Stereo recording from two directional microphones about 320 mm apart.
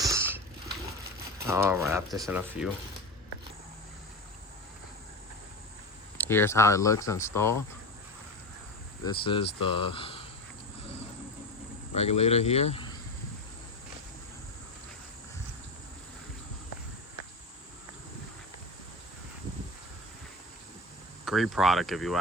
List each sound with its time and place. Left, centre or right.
0.0 s a sound: centre
1.4 s speech: centre
6.1 s speech: centre
9.0 s speech: centre
11.9 s speech: centre
21.2 s speech: centre